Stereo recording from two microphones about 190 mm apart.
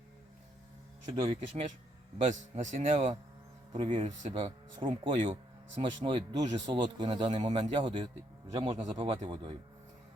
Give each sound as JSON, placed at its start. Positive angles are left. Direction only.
{"t": 1.1, "sound": "speech", "side_deg": -30}
{"t": 3.7, "sound": "speech", "side_deg": -25}